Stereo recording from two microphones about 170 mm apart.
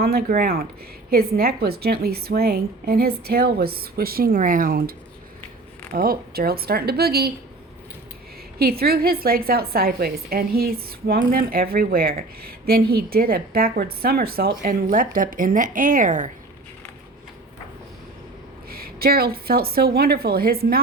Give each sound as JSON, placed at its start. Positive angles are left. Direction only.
{"t": 0.0, "sound": "a woman's voice", "side_deg": -65}
{"t": 8.5, "sound": "a woman's voice", "side_deg": -65}
{"t": 18.7, "sound": "a woman's voice", "side_deg": -60}